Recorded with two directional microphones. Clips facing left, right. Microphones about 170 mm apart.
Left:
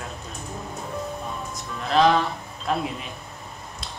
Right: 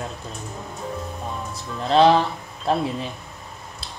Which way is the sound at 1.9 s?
30° right (ahead or behind).